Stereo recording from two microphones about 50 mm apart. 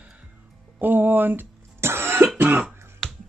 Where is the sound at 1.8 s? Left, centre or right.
Right.